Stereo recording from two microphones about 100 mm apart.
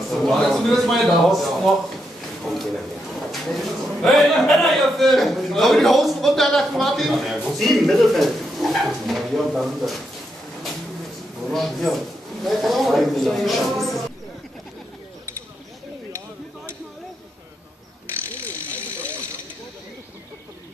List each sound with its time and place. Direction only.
0.2 s a man's voice: centre (ahead or behind)
11.4 s a man's voice: centre (ahead or behind)